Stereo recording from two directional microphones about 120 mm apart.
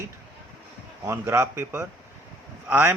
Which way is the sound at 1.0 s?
20° right (ahead or behind).